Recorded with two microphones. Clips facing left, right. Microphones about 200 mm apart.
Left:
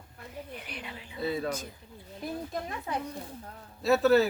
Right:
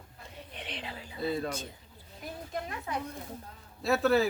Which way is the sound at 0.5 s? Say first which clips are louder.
Even; 25° right (ahead or behind).